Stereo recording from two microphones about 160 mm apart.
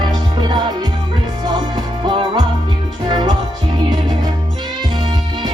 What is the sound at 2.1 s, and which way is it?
Music, 30° right (ahead or behind).